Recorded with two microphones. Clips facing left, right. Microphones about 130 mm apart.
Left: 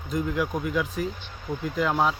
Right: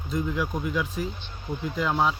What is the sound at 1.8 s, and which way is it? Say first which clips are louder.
Speech: left 1 dB; 5° left (ahead or behind).